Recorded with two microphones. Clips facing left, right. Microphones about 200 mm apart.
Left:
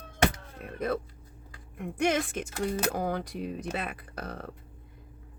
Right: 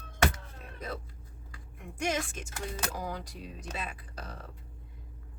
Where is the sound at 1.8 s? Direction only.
60° left (ahead or behind).